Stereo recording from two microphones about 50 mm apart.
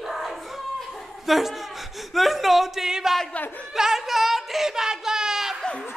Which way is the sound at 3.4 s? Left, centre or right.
Left.